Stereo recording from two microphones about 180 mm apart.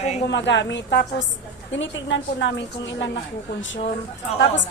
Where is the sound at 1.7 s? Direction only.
90° left.